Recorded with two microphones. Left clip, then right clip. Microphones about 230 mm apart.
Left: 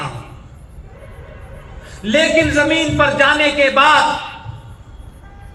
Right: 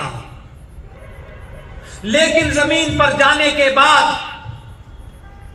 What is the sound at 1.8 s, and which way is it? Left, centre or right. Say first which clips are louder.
A man's voice: even; left.